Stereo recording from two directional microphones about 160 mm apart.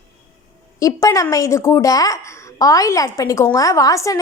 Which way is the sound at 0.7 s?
20° left (ahead or behind).